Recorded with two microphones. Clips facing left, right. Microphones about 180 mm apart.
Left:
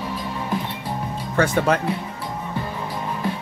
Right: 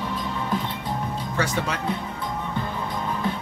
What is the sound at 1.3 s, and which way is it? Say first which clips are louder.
Speech: left 8 dB; 55° left (ahead or behind).